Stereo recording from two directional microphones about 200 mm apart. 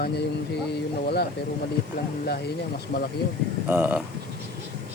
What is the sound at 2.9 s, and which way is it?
Speech, 55° left (ahead or behind).